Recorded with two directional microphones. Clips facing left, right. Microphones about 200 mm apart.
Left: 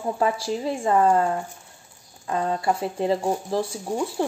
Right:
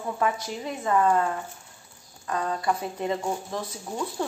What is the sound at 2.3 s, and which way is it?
A woman's voice, 25° left (ahead or behind).